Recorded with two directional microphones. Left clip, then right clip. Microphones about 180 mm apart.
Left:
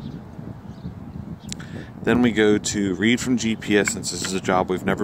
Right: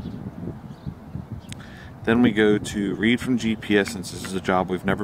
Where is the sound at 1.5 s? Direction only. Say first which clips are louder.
Left 4 dB; 25° left (ahead or behind).